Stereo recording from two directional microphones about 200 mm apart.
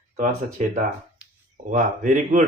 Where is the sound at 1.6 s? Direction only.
40° right (ahead or behind).